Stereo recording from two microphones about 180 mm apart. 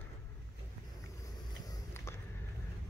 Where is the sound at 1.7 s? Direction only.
15° left (ahead or behind).